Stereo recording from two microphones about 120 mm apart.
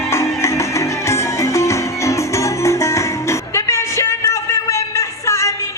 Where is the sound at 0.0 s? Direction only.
20° left (ahead or behind).